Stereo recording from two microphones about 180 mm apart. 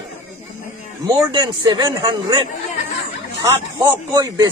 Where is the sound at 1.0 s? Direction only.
20° right (ahead or behind).